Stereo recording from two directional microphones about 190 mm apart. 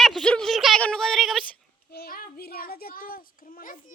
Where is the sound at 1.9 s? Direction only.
55° left (ahead or behind).